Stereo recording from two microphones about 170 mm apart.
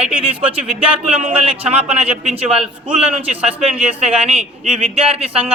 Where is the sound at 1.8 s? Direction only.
10° right (ahead or behind).